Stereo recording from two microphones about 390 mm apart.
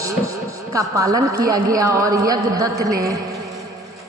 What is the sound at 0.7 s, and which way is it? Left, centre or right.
A woman's voice, centre.